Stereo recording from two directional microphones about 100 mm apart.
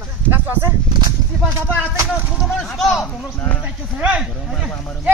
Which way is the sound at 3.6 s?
10° right (ahead or behind).